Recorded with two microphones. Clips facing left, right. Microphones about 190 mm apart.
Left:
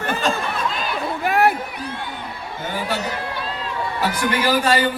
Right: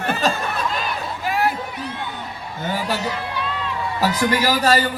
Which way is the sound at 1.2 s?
60° left (ahead or behind).